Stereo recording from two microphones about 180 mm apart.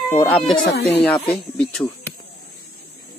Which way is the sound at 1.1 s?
25° left (ahead or behind).